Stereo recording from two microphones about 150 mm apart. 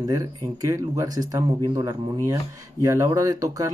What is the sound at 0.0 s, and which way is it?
Speech, 25° right (ahead or behind).